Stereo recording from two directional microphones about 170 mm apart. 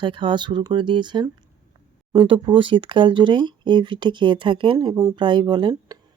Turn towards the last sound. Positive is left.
turn(degrees=-25)  # may be behind; listen again after turning